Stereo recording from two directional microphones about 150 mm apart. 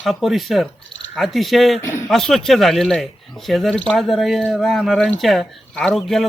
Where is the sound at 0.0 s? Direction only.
Centre (ahead or behind).